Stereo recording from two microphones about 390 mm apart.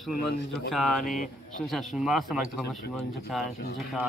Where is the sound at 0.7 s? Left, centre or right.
Centre.